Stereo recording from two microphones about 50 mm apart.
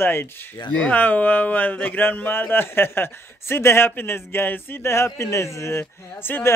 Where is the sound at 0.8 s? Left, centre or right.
Left.